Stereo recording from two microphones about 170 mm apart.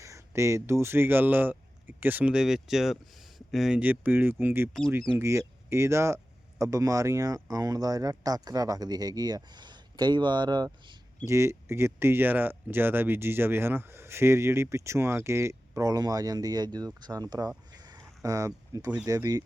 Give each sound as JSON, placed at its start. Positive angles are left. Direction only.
{"t": 0.0, "sound": "speech", "side_deg": -15}
{"t": 17.8, "sound": "a sound", "side_deg": -20}
{"t": 19.0, "sound": "speech", "side_deg": -20}